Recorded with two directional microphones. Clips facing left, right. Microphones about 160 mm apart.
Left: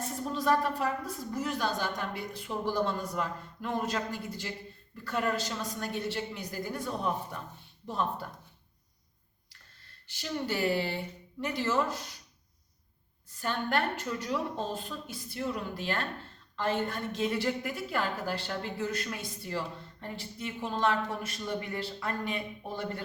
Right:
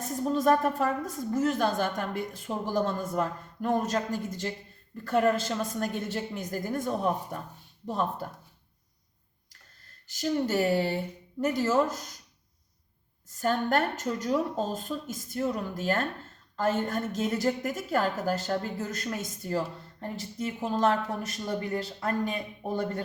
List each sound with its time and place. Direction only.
0.3 s a woman's voice: 45° right (ahead or behind)
10.1 s a woman's voice: 40° right (ahead or behind)
13.4 s a woman's voice: 45° right (ahead or behind)